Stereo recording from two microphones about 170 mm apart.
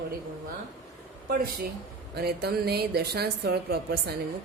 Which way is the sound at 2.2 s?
70° right (ahead or behind).